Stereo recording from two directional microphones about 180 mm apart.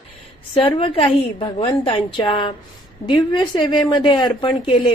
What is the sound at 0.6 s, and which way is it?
A woman's voice, 30° left (ahead or behind).